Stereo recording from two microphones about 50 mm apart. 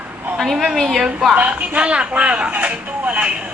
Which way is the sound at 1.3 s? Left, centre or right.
Right.